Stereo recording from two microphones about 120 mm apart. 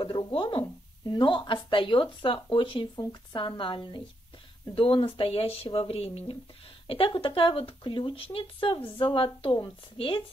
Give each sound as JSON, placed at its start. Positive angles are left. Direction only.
{"t": 0.0, "sound": "a woman's voice", "side_deg": 45}